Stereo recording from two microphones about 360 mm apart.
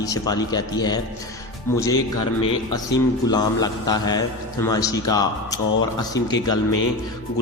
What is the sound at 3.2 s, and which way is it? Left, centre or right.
A man's voice, centre.